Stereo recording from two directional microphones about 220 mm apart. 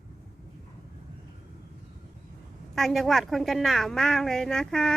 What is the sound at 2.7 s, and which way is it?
A woman's voice, centre (ahead or behind).